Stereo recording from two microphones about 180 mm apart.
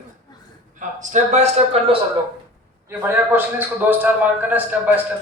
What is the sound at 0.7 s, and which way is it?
Speech, 45° right (ahead or behind).